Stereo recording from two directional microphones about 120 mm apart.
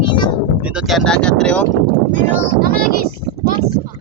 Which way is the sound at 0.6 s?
5° right (ahead or behind).